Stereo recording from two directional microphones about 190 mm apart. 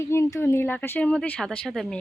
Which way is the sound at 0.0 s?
15° left (ahead or behind).